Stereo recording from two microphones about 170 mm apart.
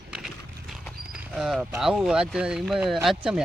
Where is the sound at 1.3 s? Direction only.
5° right (ahead or behind).